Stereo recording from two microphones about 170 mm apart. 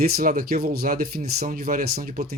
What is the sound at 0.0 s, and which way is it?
Speech, 60° right (ahead or behind).